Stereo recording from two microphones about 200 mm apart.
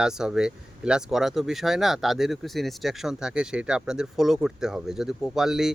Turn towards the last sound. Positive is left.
turn(degrees=0)  # may be behind; listen again after turning